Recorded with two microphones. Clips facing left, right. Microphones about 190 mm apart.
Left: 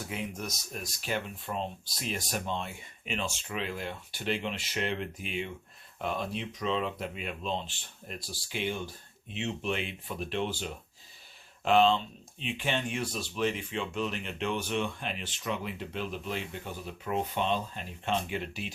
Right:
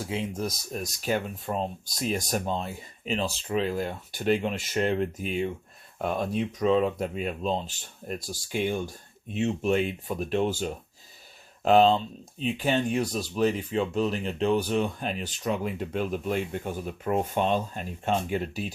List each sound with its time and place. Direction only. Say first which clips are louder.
0.1 s speech: right 8 dB; 30° right (ahead or behind)